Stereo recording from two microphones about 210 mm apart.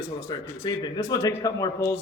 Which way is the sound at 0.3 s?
20° left (ahead or behind).